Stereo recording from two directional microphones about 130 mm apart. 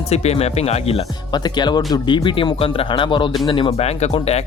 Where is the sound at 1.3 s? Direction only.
35° left (ahead or behind).